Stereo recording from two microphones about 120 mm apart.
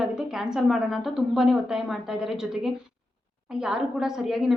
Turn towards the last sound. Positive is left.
turn(degrees=-5)  # may be behind; listen again after turning